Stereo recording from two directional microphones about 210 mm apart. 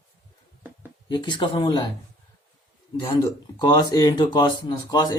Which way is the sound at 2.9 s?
20° left (ahead or behind).